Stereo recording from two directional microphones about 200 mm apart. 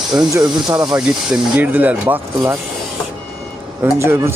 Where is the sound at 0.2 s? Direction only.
20° right (ahead or behind).